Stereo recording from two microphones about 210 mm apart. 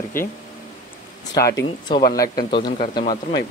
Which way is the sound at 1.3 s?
15° left (ahead or behind).